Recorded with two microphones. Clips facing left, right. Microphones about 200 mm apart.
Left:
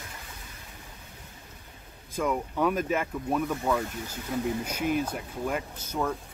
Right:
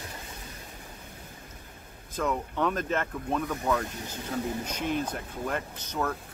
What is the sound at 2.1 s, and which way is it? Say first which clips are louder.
Speech: left 1 dB; 10° left (ahead or behind).